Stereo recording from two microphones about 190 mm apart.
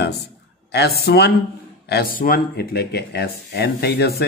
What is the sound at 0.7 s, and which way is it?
Speech, 60° left (ahead or behind).